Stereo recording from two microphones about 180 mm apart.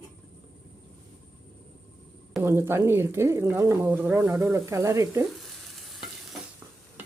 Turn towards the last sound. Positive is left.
turn(degrees=0)  # may be behind; listen again after turning